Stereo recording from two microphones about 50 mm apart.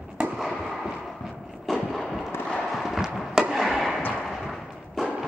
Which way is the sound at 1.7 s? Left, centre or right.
Centre.